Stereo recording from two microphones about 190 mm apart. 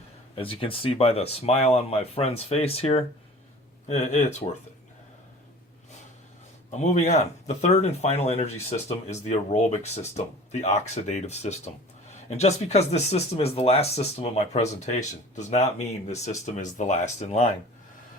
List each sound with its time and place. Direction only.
0.3 s speech: 30° left (ahead or behind)
6.7 s speech: 40° left (ahead or behind)